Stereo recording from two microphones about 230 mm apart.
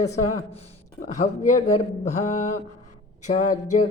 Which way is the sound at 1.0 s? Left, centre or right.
Left.